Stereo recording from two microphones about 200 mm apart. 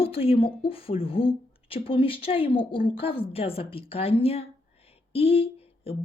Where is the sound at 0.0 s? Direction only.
30° left (ahead or behind).